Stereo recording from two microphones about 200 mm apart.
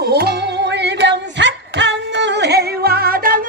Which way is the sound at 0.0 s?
55° right (ahead or behind).